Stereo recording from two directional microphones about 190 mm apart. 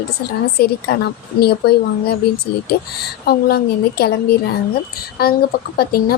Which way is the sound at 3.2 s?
55° left (ahead or behind).